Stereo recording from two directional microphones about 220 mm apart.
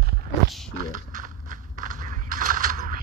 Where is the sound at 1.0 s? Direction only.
40° right (ahead or behind).